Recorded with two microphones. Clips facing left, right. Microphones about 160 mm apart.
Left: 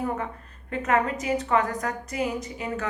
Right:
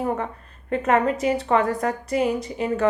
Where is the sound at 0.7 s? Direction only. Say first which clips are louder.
Right 4 dB; 30° right (ahead or behind).